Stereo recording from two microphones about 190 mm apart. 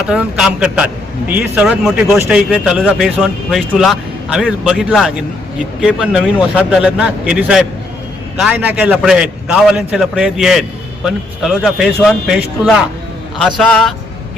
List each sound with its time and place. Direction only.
0.0 s a man's voice: 5° right (ahead or behind)